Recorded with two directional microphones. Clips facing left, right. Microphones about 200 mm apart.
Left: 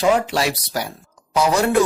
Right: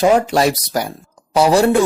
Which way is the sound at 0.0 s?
45° right (ahead or behind).